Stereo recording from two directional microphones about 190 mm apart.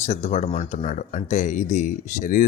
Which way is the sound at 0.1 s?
35° left (ahead or behind).